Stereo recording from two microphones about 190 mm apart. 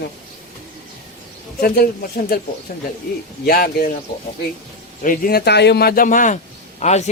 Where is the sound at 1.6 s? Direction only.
50° left (ahead or behind).